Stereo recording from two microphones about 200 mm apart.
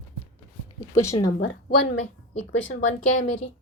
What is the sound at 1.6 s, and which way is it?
Speech, 60° left (ahead or behind).